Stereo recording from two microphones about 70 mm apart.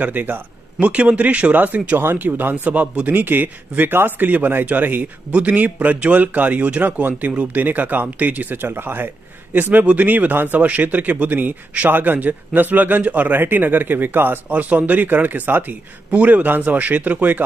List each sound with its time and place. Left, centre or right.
0.0 s a man's voice: right